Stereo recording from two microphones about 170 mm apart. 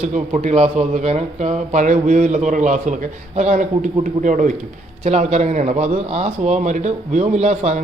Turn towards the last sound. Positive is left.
turn(degrees=-40)  # may be behind; listen again after turning